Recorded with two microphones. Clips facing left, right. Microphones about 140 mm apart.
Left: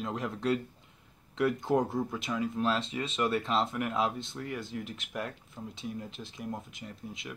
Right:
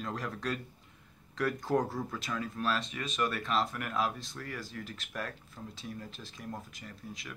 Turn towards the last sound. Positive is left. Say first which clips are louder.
# left 3 dB
turn(degrees=25)  # may be behind; listen again after turning